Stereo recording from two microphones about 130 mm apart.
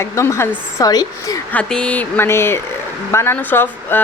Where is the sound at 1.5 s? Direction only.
10° left (ahead or behind).